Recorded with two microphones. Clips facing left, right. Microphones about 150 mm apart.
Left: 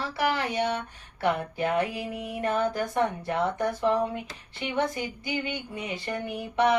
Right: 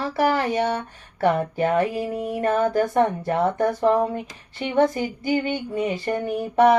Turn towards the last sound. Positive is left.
turn(degrees=-45)  # may be behind; listen again after turning